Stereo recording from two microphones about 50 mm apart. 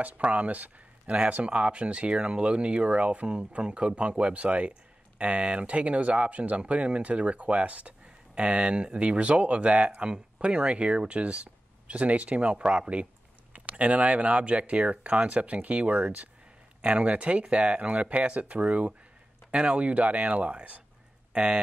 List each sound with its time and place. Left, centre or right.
0.0 s speech: right